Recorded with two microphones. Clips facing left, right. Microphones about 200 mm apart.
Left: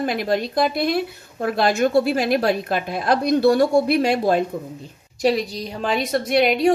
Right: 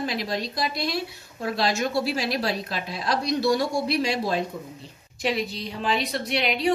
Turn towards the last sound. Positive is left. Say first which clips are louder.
# left 8 dB
turn(degrees=50)  # may be behind; listen again after turning